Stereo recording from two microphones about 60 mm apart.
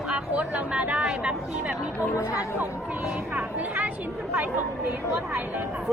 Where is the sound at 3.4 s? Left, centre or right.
Right.